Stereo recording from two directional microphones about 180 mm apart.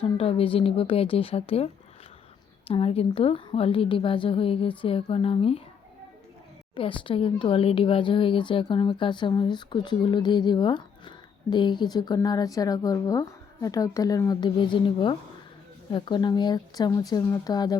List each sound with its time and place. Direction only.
0.0 s a woman's voice: 30° left (ahead or behind)
6.7 s speech: 30° left (ahead or behind)